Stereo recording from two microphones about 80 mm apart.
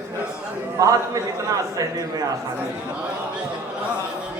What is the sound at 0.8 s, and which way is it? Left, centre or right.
A man's voice, right.